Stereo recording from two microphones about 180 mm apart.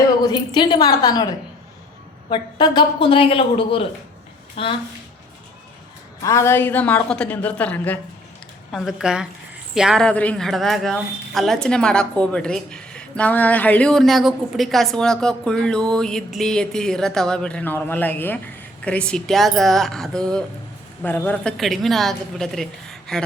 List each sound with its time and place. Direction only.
0.3 s speech: 25° left (ahead or behind)
2.3 s speech: 25° left (ahead or behind)
6.2 s a woman's voice: 15° left (ahead or behind)